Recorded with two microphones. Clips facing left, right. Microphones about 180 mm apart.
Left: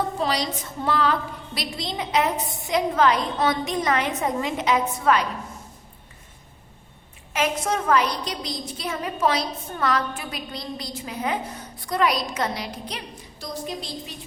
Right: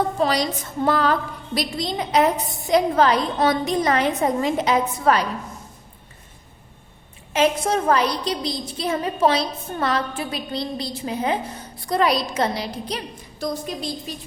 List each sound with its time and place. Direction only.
0.2 s a woman's voice: 50° right (ahead or behind)
7.3 s a woman's voice: 30° right (ahead or behind)
13.4 s a woman's voice: 50° right (ahead or behind)